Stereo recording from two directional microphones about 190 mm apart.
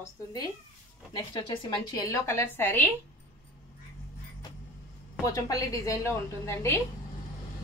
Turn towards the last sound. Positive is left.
turn(degrees=15)  # may be behind; listen again after turning